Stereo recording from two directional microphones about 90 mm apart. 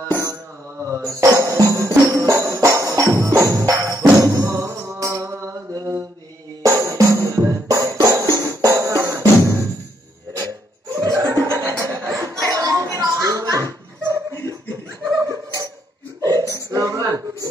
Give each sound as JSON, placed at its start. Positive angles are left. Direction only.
{"t": 0.8, "sound": "music", "side_deg": -35}
{"t": 6.6, "sound": "music", "side_deg": -35}
{"t": 11.0, "sound": "chuckle", "side_deg": -40}
{"t": 15.2, "sound": "a sound", "side_deg": -40}
{"t": 16.2, "sound": "burping", "side_deg": -45}
{"t": 16.7, "sound": "a sound", "side_deg": -40}